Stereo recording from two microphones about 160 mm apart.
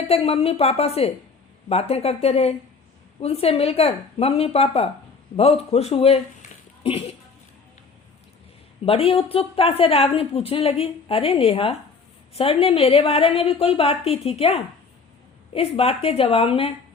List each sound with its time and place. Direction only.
0.1 s a woman's voice: 40° left (ahead or behind)
8.8 s a woman's voice: 35° left (ahead or behind)